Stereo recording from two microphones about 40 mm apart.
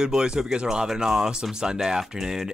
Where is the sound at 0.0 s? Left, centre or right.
Centre.